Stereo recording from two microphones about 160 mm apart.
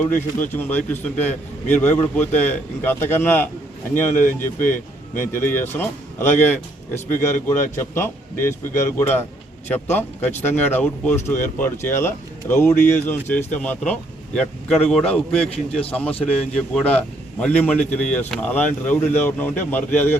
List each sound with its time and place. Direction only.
0.0 s speech: 10° left (ahead or behind)
4.1 s speech: 55° left (ahead or behind)
4.4 s speech: 15° left (ahead or behind)